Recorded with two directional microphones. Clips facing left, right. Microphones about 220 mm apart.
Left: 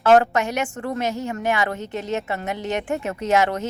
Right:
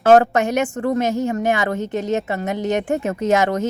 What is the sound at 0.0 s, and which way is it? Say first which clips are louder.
Speech: right 3 dB; 45° right (ahead or behind).